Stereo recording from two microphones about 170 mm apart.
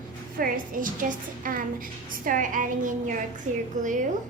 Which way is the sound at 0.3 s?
55° right (ahead or behind).